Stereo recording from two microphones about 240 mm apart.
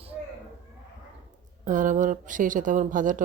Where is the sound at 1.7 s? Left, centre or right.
Right.